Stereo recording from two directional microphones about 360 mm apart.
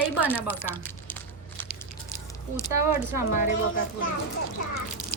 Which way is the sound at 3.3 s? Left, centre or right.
Left.